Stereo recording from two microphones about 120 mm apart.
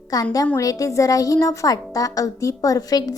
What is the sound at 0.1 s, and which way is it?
A woman's voice, 30° left (ahead or behind).